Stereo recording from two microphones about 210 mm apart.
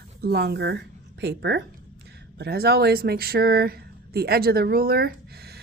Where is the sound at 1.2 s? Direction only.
55° right (ahead or behind).